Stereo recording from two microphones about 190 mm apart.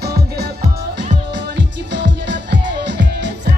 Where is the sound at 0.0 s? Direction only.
55° right (ahead or behind).